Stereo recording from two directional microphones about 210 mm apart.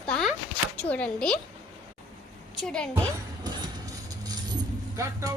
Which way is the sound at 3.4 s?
20° right (ahead or behind).